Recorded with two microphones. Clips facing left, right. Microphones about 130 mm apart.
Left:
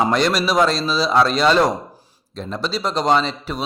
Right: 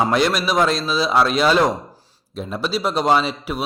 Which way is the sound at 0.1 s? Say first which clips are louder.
Even; centre (ahead or behind).